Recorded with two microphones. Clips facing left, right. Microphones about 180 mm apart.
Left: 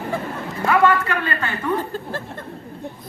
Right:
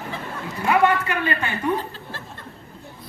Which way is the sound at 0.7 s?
20° right (ahead or behind).